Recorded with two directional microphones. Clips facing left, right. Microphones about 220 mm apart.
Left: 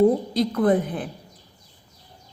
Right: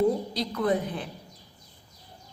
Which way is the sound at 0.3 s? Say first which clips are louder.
Left 7 dB; 50° left (ahead or behind).